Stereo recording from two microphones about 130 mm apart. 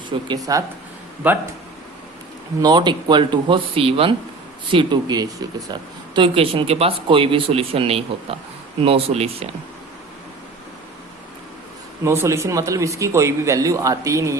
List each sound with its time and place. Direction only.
0.1 s speech: 40° right (ahead or behind)
0.5 s a man's voice: 25° right (ahead or behind)
1.2 s speech: 15° right (ahead or behind)
2.6 s speech: 35° right (ahead or behind)
6.1 s speech: 45° right (ahead or behind)
12.0 s a man's voice: 20° right (ahead or behind)